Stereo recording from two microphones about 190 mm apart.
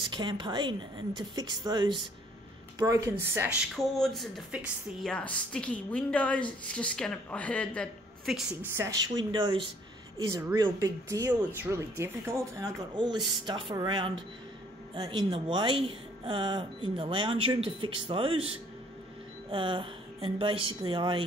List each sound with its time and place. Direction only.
0.1 s speech: 25° right (ahead or behind)
3.7 s a woman's voice: centre (ahead or behind)
8.7 s speech: 15° right (ahead or behind)